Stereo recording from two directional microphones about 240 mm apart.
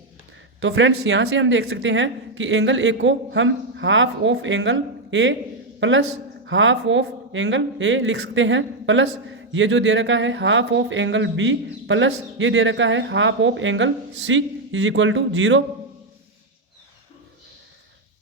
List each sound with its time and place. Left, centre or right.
0.6 s speech: right